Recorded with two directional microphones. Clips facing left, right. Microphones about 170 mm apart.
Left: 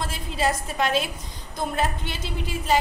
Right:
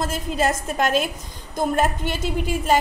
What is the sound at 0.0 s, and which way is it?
A woman's voice, 45° right (ahead or behind).